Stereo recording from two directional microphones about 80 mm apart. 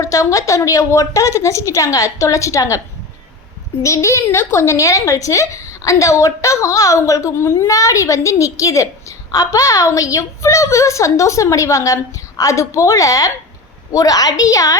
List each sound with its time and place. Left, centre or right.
0.0 s a woman's voice: left
3.8 s a woman's voice: left